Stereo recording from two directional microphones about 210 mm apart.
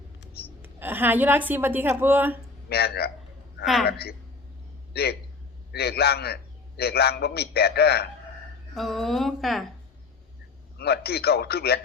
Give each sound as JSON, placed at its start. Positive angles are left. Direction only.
{"t": 0.6, "sound": "a woman's voice", "side_deg": -10}
{"t": 2.6, "sound": "a man's voice", "side_deg": 50}
{"t": 8.7, "sound": "a woman's voice", "side_deg": 0}
{"t": 10.8, "sound": "a man's voice", "side_deg": 50}